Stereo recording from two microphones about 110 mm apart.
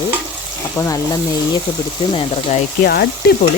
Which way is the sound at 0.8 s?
30° left (ahead or behind).